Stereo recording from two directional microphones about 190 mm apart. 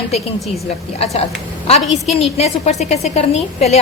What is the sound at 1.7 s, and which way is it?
A woman's voice, 35° left (ahead or behind).